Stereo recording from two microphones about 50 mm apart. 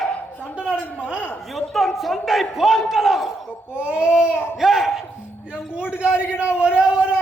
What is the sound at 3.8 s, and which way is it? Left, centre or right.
Speech, right.